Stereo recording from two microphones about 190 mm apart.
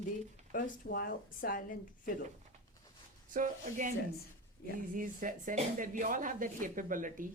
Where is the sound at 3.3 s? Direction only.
45° right (ahead or behind).